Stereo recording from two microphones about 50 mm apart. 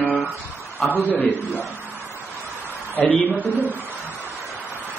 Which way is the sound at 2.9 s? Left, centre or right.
Left.